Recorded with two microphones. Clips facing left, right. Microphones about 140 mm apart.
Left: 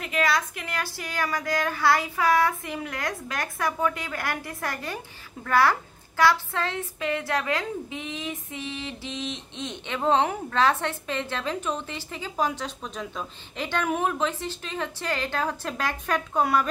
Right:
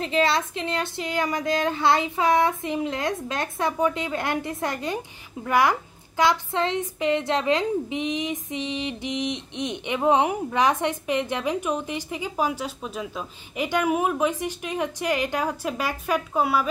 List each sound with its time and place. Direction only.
0.0 s speech: 25° right (ahead or behind); by 16.6 s 5° right (ahead or behind)